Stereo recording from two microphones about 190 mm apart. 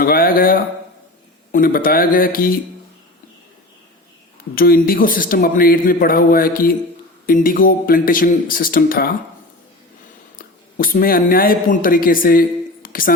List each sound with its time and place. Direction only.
0.0 s a man's voice: 50° left (ahead or behind)
4.5 s a man's voice: 50° left (ahead or behind)
10.3 s a man's voice: 45° left (ahead or behind)